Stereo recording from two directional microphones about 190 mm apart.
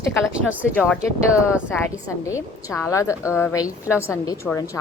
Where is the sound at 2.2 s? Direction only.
15° left (ahead or behind).